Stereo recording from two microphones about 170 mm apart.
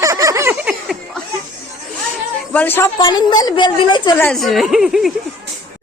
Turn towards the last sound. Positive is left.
turn(degrees=0)  # may be behind; listen again after turning